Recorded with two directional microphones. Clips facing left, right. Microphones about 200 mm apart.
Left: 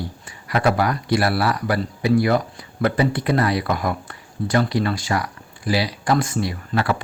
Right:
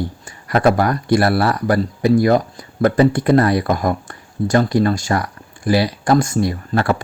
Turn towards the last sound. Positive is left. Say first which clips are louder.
# right 4 dB
turn(degrees=-45)  # may be behind; listen again after turning